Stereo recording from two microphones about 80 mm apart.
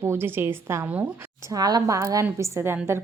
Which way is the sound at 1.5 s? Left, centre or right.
Right.